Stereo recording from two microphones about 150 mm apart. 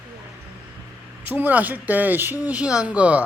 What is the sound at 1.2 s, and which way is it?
Speech, 10° right (ahead or behind).